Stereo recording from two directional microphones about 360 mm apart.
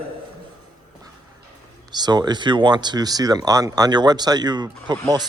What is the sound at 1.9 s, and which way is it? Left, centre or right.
Speech, centre.